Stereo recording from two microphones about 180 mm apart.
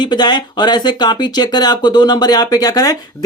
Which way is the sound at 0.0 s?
25° left (ahead or behind).